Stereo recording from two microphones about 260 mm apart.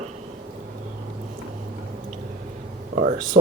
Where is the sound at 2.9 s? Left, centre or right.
Right.